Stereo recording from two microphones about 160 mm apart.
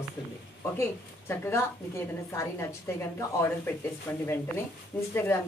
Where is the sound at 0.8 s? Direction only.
15° left (ahead or behind).